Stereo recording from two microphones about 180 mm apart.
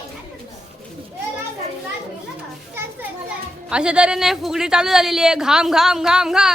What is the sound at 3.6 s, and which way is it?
Speech, 5° right (ahead or behind).